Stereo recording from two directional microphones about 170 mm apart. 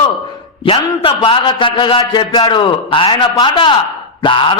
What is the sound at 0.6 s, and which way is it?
A man's voice, 30° left (ahead or behind).